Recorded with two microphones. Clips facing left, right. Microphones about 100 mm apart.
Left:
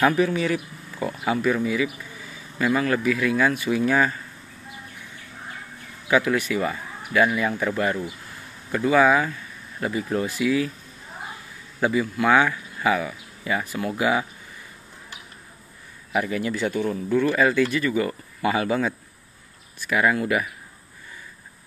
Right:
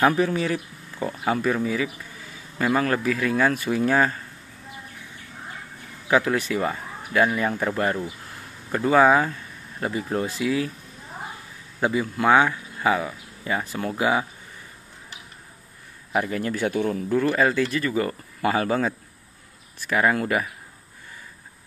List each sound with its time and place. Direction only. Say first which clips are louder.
0.0 s speech: even; 35° right (ahead or behind)
6.0 s speech: even; 30° right (ahead or behind)
11.8 s speech: even; 25° right (ahead or behind)
16.1 s a man's voice: even; 35° right (ahead or behind)
16.5 s speech: right 2 dB; 55° right (ahead or behind)
17.1 s speech: left 1 dB; 35° right (ahead or behind)